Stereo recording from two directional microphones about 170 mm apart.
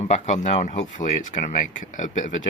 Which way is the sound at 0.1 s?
45° left (ahead or behind).